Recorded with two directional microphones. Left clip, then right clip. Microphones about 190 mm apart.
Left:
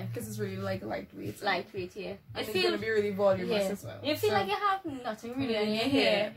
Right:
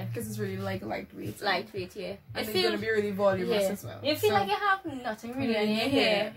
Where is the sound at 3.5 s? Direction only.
5° right (ahead or behind).